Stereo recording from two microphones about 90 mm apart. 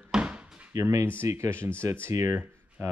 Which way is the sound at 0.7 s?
30° right (ahead or behind).